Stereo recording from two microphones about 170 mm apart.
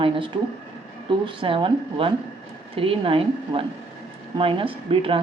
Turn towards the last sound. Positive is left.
turn(degrees=-30)  # may be behind; listen again after turning